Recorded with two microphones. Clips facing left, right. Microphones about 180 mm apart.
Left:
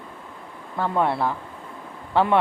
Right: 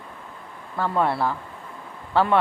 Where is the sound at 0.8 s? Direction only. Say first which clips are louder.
Even; 15° left (ahead or behind).